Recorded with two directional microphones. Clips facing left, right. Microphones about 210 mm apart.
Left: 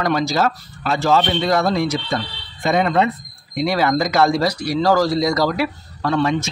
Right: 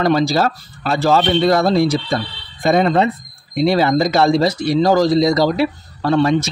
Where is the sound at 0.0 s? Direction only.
30° right (ahead or behind).